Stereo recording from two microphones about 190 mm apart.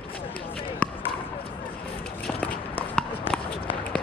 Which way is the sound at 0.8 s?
5° left (ahead or behind).